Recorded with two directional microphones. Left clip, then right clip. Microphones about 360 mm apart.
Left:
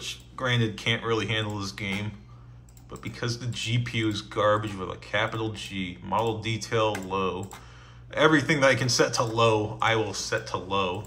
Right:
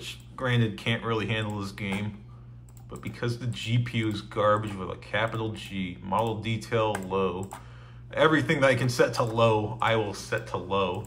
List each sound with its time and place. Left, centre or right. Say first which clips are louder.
0.0 s speech: left 2 dB; centre